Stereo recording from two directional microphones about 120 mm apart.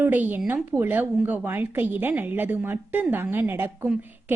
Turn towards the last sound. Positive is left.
turn(degrees=-20)  # may be behind; listen again after turning